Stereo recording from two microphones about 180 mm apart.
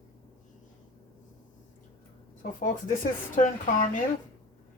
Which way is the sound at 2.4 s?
50° left (ahead or behind).